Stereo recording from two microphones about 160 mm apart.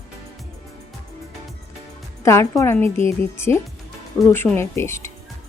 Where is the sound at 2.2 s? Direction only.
20° left (ahead or behind).